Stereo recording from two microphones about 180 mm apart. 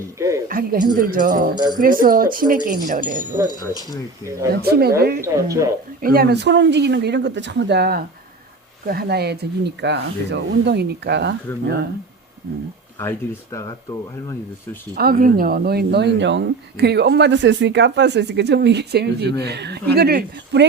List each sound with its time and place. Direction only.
0.2 s a sound: 15° right (ahead or behind)
0.4 s speech: 50° right (ahead or behind)
4.5 s speech: 60° right (ahead or behind)
5.2 s speech: 15° right (ahead or behind)
6.0 s speech: 55° right (ahead or behind)
13.0 s speech: 15° left (ahead or behind)
14.9 s speech: 55° right (ahead or behind)